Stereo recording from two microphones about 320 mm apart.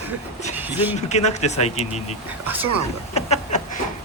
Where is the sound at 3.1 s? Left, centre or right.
Left.